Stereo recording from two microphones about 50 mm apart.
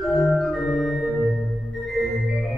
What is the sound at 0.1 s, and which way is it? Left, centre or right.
Organ, centre.